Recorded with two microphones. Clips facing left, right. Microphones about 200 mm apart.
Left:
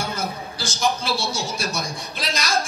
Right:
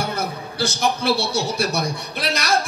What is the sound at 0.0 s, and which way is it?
A man's voice, 60° right (ahead or behind).